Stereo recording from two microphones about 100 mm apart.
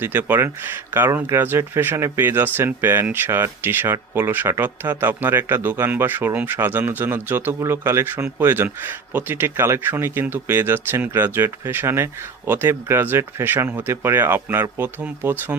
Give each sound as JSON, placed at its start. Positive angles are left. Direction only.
{"t": 0.0, "sound": "speech", "side_deg": -20}